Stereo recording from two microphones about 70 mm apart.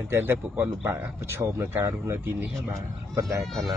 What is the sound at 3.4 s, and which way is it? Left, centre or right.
Speech, centre.